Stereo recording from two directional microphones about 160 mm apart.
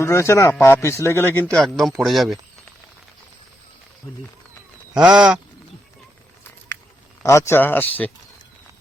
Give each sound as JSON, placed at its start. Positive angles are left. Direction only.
{"t": 0.0, "sound": "speech", "side_deg": 15}
{"t": 1.5, "sound": "speech", "side_deg": 0}
{"t": 4.9, "sound": "speech", "side_deg": -5}
{"t": 7.2, "sound": "speech", "side_deg": 20}